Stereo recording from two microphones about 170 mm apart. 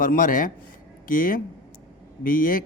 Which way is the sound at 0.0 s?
55° left (ahead or behind).